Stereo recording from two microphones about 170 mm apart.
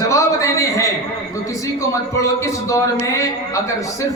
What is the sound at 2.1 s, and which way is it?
Speech, 20° left (ahead or behind).